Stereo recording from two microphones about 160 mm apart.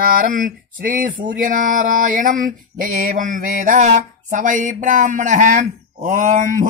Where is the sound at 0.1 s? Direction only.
60° right (ahead or behind).